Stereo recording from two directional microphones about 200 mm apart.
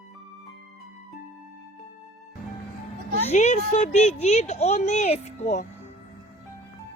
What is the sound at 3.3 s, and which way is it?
Speech, 35° left (ahead or behind).